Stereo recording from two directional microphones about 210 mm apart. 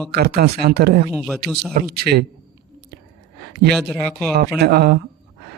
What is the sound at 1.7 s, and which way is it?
Speech, 50° right (ahead or behind).